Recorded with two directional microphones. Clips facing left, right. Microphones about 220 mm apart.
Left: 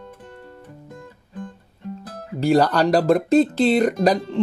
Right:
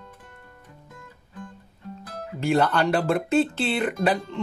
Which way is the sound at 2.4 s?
40° left (ahead or behind).